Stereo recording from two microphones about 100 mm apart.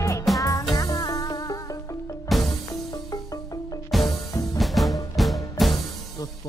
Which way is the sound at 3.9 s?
Centre (ahead or behind).